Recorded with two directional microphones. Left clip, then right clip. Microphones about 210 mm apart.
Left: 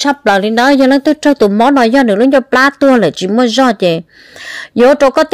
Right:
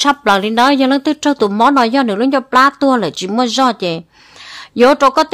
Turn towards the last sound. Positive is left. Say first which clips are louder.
# left 2 dB
turn(degrees=15)  # may be behind; listen again after turning